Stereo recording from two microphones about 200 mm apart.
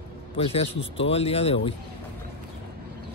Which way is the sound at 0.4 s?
30° left (ahead or behind).